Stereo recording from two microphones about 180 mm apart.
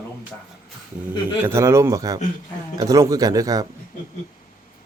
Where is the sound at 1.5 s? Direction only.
15° right (ahead or behind).